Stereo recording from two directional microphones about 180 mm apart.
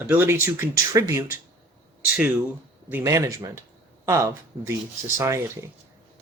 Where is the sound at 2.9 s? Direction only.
15° right (ahead or behind).